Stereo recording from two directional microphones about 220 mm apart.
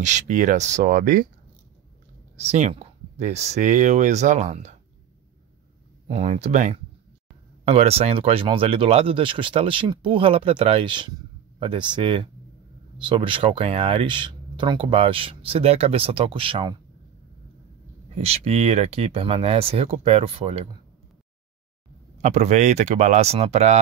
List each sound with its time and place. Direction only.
0.0 s speech: 35° right (ahead or behind)
2.4 s speech: 30° right (ahead or behind)
6.0 s speech: 30° right (ahead or behind)
18.1 s speech: 30° right (ahead or behind)
22.2 s speech: 30° right (ahead or behind)